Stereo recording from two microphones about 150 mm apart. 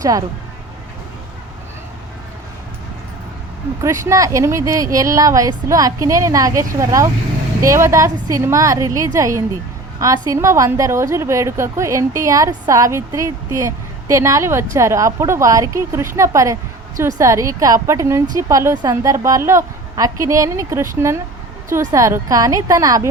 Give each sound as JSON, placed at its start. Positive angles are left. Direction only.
{"t": 0.0, "sound": "a woman's voice", "side_deg": -25}
{"t": 3.8, "sound": "a woman's voice", "side_deg": -20}